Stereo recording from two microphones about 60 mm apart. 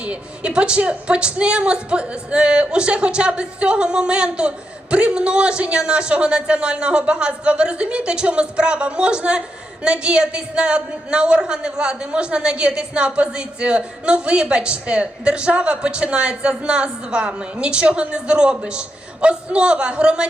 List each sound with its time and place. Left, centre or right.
0.0 s a man's voice: centre